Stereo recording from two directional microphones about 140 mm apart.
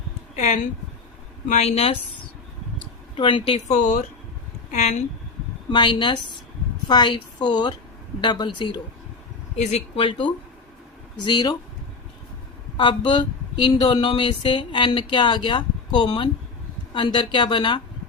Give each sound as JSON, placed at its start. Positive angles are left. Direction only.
{"t": 0.3, "sound": "speech", "side_deg": 60}
{"t": 3.2, "sound": "speech", "side_deg": 35}
{"t": 3.7, "sound": "speech", "side_deg": 60}
{"t": 5.7, "sound": "speech", "side_deg": 35}
{"t": 9.6, "sound": "speech", "side_deg": 55}
{"t": 10.0, "sound": "speech", "side_deg": 35}
{"t": 12.7, "sound": "speech", "side_deg": 35}